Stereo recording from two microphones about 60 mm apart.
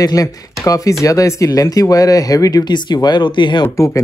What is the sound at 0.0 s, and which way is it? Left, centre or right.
Speech, left.